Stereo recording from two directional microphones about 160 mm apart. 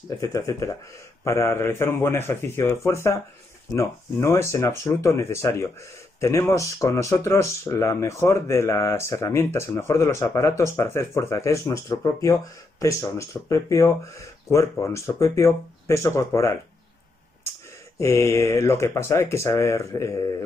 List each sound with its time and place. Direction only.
0.2 s speech: 20° left (ahead or behind)
17.9 s speech: 15° left (ahead or behind)